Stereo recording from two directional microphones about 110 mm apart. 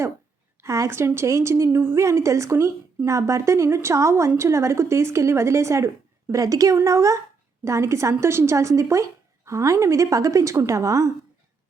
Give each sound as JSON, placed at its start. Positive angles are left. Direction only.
{"t": 0.6, "sound": "a woman's voice", "side_deg": -25}